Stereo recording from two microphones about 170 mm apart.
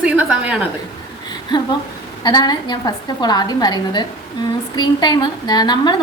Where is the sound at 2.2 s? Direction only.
25° left (ahead or behind).